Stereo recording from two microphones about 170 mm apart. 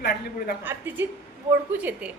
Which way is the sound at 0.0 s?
70° left (ahead or behind).